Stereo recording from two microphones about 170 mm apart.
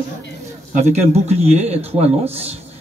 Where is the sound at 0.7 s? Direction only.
40° right (ahead or behind).